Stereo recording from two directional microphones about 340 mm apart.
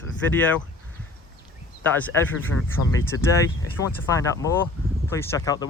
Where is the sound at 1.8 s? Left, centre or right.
Centre.